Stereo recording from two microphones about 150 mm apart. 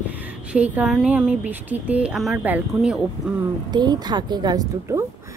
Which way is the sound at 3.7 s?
30° right (ahead or behind).